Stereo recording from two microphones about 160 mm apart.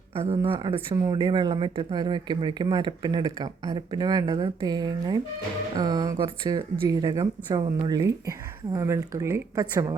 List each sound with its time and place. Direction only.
0.2 s speech: 35° right (ahead or behind)